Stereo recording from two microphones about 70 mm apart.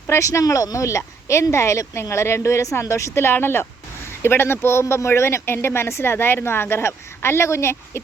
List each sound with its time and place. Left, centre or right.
0.1 s speech: left